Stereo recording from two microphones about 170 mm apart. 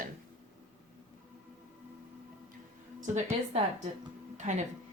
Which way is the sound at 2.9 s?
45° right (ahead or behind).